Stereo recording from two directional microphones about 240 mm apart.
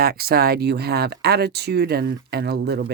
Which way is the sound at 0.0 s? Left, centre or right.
Right.